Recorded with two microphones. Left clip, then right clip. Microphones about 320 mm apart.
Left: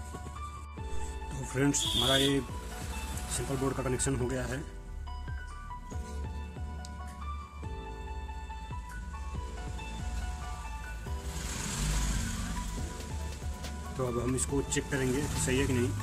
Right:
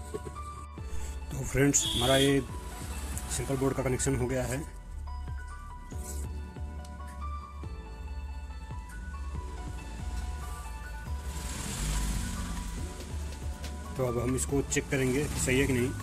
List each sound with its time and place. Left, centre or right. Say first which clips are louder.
1.3 s speech: right 4 dB; centre
13.9 s speech: right 2 dB; centre